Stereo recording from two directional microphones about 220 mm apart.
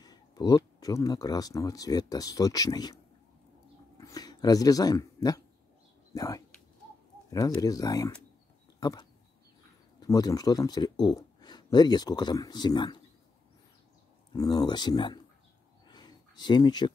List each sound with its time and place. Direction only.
0.0 s speech: 15° left (ahead or behind)
4.0 s speech: 15° left (ahead or behind)
8.7 s a sound: 15° left (ahead or behind)
9.9 s a man's voice: 15° left (ahead or behind)
14.3 s speech: 15° left (ahead or behind)
15.9 s a sound: 20° left (ahead or behind)